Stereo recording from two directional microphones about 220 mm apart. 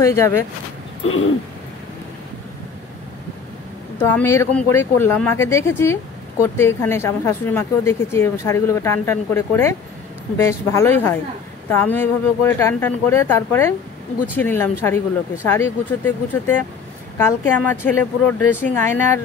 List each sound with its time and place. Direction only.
0.0 s speech: 10° left (ahead or behind)
1.0 s a sound: 65° left (ahead or behind)
4.1 s speech: 10° left (ahead or behind)